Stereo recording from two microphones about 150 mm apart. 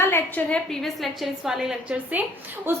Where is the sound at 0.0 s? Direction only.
15° left (ahead or behind); by 2.2 s 5° right (ahead or behind).